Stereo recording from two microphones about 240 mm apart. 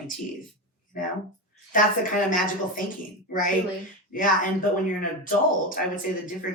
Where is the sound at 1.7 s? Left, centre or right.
Left.